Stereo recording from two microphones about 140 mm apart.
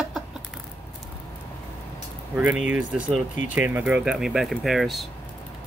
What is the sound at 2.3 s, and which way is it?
Speech, 10° right (ahead or behind).